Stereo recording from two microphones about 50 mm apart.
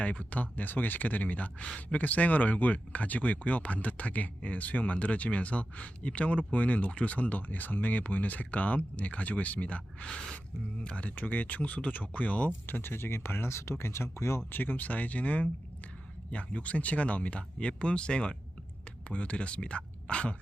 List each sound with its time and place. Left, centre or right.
0.0 s speech: left
11.1 s speech: left
12.6 s speech: left
14.5 s speech: left